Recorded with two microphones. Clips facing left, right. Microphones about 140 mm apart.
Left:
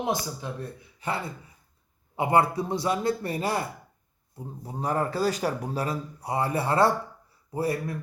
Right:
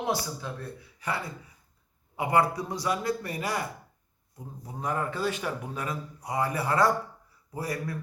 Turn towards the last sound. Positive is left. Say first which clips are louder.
# left 5 dB
turn(degrees=25)  # may be behind; listen again after turning